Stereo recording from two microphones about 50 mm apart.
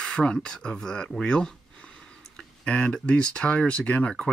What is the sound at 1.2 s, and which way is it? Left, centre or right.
Speech, left.